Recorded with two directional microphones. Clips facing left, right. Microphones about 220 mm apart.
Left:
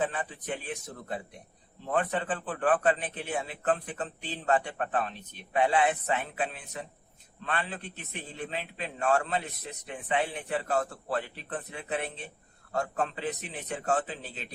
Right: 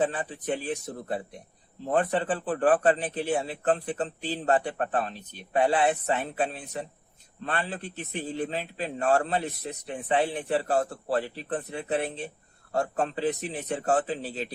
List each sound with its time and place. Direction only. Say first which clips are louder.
0.0 s a man's voice: right 4 dB; 35° right (ahead or behind)